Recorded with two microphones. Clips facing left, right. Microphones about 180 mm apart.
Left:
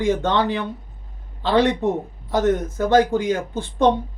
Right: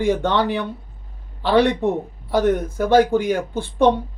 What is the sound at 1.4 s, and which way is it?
Speech, 15° right (ahead or behind).